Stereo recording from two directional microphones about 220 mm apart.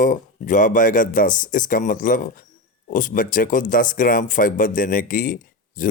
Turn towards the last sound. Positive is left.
turn(degrees=40)  # may be behind; listen again after turning